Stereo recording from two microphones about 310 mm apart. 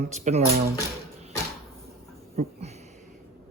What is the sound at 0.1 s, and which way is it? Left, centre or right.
Speech, right.